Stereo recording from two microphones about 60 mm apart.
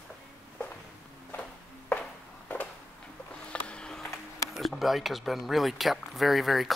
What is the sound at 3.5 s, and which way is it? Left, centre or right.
Sniff, centre.